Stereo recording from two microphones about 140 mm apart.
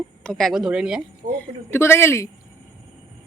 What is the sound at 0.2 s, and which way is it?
Speech, 5° left (ahead or behind).